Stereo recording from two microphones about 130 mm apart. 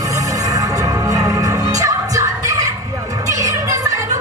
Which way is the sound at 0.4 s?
25° right (ahead or behind).